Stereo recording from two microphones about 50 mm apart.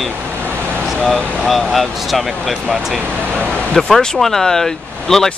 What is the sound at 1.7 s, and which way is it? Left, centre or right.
Speech, centre.